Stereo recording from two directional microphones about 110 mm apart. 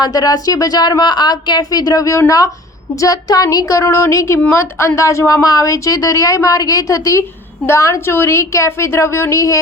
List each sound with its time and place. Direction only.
0.0 s a woman's voice: 35° left (ahead or behind)